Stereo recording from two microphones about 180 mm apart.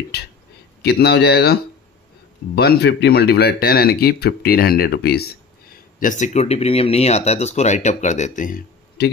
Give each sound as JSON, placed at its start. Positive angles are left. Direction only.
{"t": 0.8, "sound": "speech", "side_deg": 65}
{"t": 5.9, "sound": "speech", "side_deg": 45}